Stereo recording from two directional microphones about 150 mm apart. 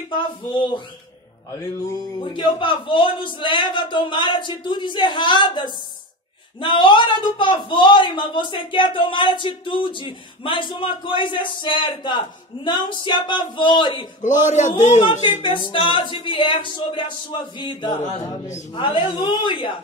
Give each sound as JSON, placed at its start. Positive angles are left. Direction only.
{"t": 0.1, "sound": "speech", "side_deg": 30}
{"t": 14.2, "sound": "speech", "side_deg": 55}
{"t": 15.4, "sound": "speech", "side_deg": 35}